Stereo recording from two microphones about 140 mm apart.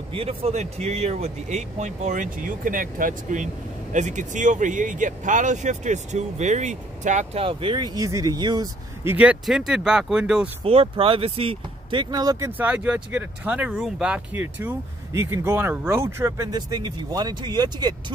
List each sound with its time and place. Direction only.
0.1 s speech: 40° right (ahead or behind); by 3.4 s 75° right (ahead or behind)
3.9 s speech: 60° right (ahead or behind)
7.4 s speech: 35° right (ahead or behind)
9.0 s speech: 10° right (ahead or behind)
10.6 s speech: 45° right (ahead or behind); by 16.5 s 20° right (ahead or behind)
16.5 s speech: 30° right (ahead or behind)